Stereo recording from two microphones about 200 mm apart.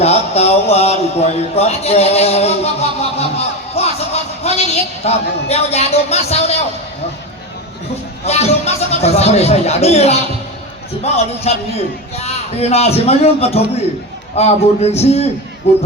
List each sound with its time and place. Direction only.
0.0 s speech: 30° left (ahead or behind)
8.2 s speech: 30° left (ahead or behind)
11.5 s speech: 30° left (ahead or behind)